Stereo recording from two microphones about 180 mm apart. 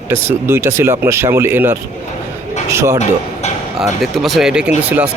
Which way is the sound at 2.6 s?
15° right (ahead or behind).